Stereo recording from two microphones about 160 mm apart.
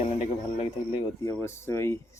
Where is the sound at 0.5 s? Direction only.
35° left (ahead or behind).